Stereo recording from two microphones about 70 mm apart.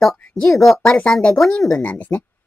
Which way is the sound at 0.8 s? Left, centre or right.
Centre.